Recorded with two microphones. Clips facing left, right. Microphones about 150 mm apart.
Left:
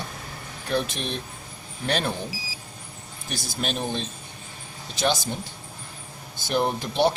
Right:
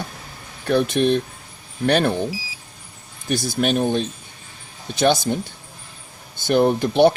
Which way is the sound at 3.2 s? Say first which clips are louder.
Right 10 dB; 60° right (ahead or behind).